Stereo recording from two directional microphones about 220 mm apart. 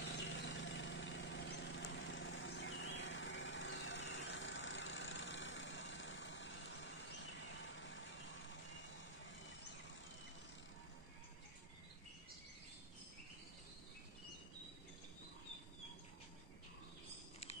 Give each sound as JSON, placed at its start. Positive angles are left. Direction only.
{"t": 0.2, "sound": "vehicle", "side_deg": 55}